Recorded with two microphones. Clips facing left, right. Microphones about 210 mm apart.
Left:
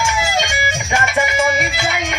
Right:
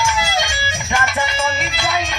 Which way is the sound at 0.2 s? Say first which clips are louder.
Left 2 dB; 20° left (ahead or behind).